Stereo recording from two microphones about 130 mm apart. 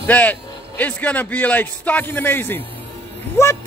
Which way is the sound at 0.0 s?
10° left (ahead or behind).